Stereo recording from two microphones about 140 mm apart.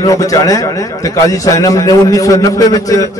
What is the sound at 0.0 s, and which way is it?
A man's voice, 25° left (ahead or behind).